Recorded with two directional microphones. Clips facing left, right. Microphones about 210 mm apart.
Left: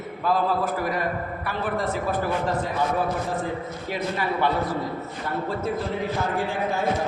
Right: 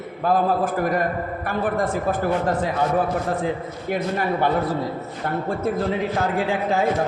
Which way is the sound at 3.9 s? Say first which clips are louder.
Right 4 dB; 50° right (ahead or behind).